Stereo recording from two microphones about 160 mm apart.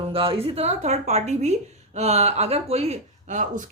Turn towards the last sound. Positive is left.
turn(degrees=-50)  # may be behind; listen again after turning